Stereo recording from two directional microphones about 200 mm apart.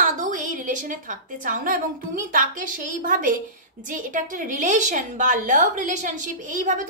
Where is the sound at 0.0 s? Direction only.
40° right (ahead or behind).